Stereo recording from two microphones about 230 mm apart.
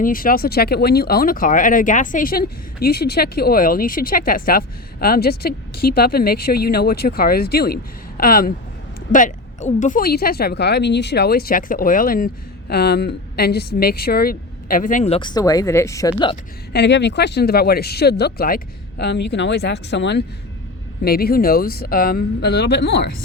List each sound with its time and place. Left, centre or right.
0.0 s speech: left; by 16.4 s centre
16.7 s speech: left